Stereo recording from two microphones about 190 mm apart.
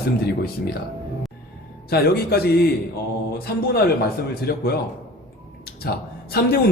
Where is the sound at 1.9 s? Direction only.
55° left (ahead or behind).